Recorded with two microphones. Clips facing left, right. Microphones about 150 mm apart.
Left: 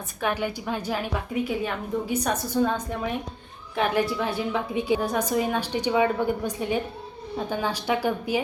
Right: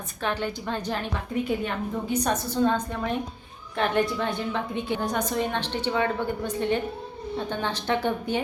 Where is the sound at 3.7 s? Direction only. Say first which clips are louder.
Even; 5° left (ahead or behind).